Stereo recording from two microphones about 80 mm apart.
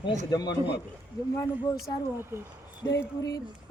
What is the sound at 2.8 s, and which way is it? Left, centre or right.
Speech, left.